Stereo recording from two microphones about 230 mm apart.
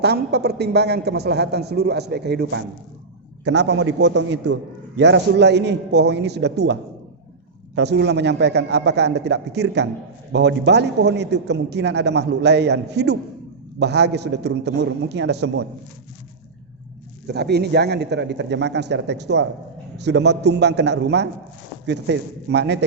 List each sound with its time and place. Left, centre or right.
0.0 s a man's voice: right
7.8 s a man's voice: right
17.2 s a man's voice: right